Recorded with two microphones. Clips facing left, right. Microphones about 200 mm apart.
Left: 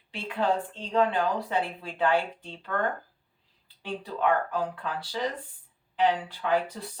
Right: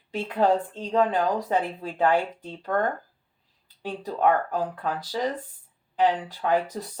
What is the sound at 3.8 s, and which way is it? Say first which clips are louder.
Speech: right 4 dB; 40° right (ahead or behind).